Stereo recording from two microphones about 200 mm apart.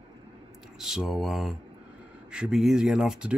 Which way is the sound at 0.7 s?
Centre (ahead or behind).